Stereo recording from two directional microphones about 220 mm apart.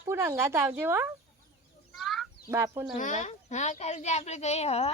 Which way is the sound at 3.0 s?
35° left (ahead or behind).